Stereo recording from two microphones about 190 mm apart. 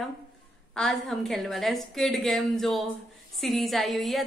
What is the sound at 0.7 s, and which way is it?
A woman's voice, centre (ahead or behind).